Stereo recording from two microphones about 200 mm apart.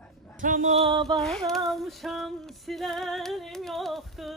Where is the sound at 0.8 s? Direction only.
25° right (ahead or behind).